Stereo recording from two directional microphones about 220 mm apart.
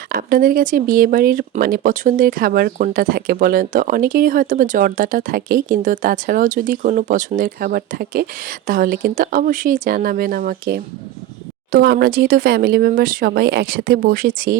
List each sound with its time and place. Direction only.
0.1 s speech: 40° right (ahead or behind)